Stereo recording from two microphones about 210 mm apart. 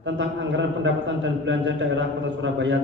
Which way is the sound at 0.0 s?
60° right (ahead or behind).